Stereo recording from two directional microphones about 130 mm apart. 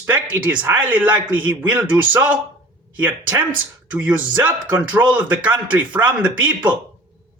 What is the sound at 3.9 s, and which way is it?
Speech, 15° right (ahead or behind).